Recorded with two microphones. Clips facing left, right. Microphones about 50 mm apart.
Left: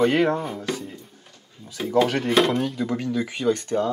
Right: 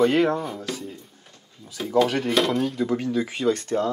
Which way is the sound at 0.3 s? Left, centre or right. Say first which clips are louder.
Left 1 dB; centre.